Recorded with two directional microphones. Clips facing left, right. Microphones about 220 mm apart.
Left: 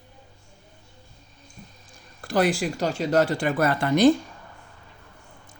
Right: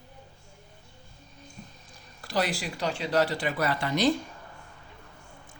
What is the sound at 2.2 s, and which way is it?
Speech, 50° left (ahead or behind).